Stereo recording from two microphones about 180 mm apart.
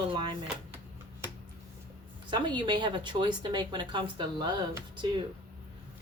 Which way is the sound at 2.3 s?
25° right (ahead or behind).